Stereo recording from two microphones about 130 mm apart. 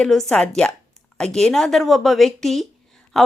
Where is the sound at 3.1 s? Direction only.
5° left (ahead or behind).